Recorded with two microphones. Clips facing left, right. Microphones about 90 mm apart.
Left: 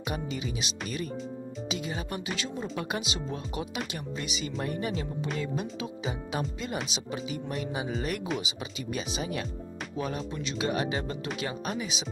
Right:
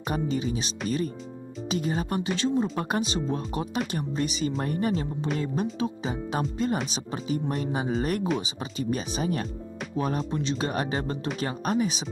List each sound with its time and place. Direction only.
0.1 s speech: 35° right (ahead or behind)